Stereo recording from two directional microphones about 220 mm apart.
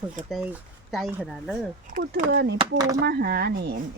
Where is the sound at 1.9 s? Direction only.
45° right (ahead or behind).